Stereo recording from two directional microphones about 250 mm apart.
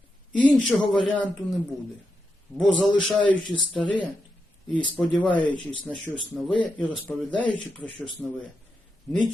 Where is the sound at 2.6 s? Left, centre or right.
Centre.